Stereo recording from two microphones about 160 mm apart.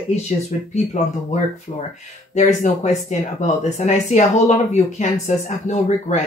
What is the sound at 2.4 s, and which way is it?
Speech, 45° left (ahead or behind).